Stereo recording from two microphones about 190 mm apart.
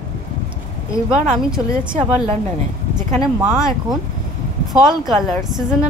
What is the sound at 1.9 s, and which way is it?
Speech, 25° right (ahead or behind).